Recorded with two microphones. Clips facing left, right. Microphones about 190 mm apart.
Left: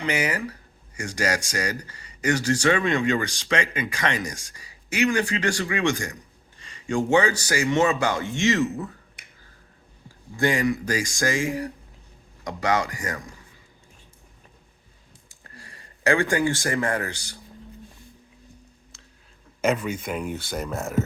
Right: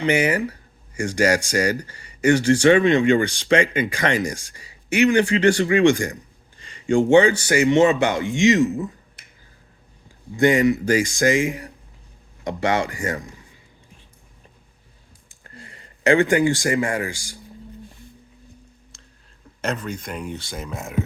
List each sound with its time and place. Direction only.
0.0 s speech: 30° right (ahead or behind)
10.3 s speech: 20° right (ahead or behind)
15.5 s speech: 20° right (ahead or behind)
19.6 s speech: 5° left (ahead or behind)